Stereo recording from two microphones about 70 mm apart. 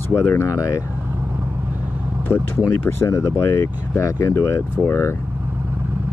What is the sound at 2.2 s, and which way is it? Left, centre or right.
Speech, left.